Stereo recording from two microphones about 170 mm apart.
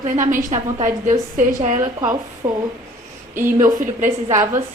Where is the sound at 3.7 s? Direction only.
50° right (ahead or behind).